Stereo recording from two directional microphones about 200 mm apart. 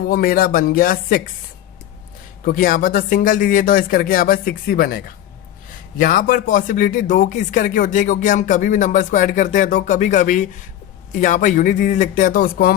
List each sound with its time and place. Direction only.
0.1 s speech: 45° left (ahead or behind)
2.4 s speech: 45° left (ahead or behind)
6.0 s speech: 45° left (ahead or behind)